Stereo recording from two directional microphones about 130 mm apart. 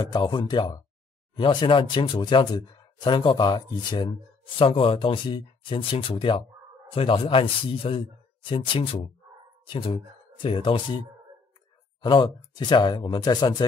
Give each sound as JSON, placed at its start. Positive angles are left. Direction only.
{"t": 0.0, "sound": "a man's voice", "side_deg": 35}